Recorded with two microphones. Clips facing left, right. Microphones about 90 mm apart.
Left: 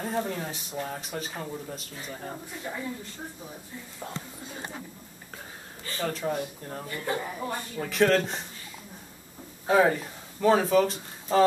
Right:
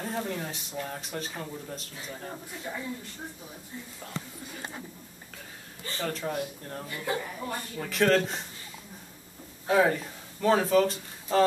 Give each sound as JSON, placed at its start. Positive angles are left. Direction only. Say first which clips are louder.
{"t": 0.0, "sound": "speech", "louder": "left 2 dB", "side_deg": 5}
{"t": 4.0, "sound": "a woman's voice", "louder": "left 3 dB", "side_deg": 25}
{"t": 6.0, "sound": "speech", "louder": "left 2 dB", "side_deg": 5}
{"t": 6.9, "sound": "speech", "louder": "left 1 dB", "side_deg": -5}
{"t": 7.2, "sound": "a woman's voice", "louder": "left 2 dB", "side_deg": 20}
{"t": 7.8, "sound": "speech", "louder": "left 1 dB", "side_deg": 0}
{"t": 9.7, "sound": "speech", "louder": "left 2 dB", "side_deg": 5}